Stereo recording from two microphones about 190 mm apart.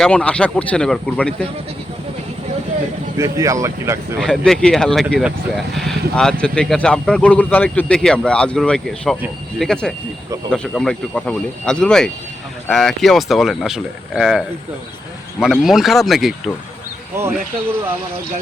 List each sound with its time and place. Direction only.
0.0 s speech: 5° left (ahead or behind)
3.2 s speech: 15° right (ahead or behind)
4.2 s speech: 5° left (ahead or behind)